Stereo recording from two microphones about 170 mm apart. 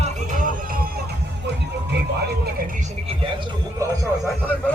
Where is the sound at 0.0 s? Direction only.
50° right (ahead or behind).